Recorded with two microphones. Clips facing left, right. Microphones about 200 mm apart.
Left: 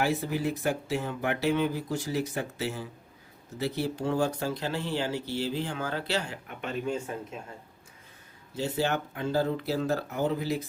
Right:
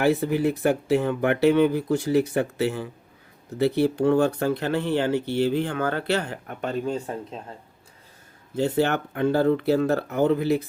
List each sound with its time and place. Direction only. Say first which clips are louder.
0.0 s speech: right 7 dB; 60° right (ahead or behind); by 7.4 s 35° right (ahead or behind)
8.5 s speech: right 6 dB; 60° right (ahead or behind)